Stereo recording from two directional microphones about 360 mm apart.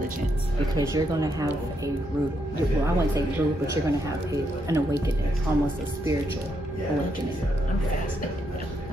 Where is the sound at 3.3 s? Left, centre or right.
Centre.